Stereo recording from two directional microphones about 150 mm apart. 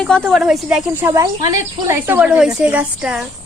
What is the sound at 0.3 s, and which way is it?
Speech, centre (ahead or behind).